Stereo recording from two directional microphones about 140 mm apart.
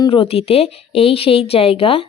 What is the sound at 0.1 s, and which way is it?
Speech, 45° left (ahead or behind).